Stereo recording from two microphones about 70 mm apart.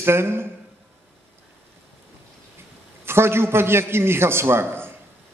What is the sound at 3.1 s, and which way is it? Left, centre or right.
A man's voice, right.